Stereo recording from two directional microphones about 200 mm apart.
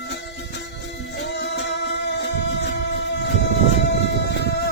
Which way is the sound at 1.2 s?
60° left (ahead or behind).